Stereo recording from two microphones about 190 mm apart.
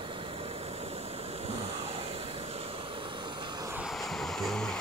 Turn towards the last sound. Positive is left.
turn(degrees=5)  # may be behind; listen again after turning